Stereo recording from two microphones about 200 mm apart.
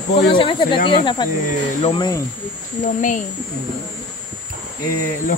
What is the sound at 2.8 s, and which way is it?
Speech, 40° left (ahead or behind).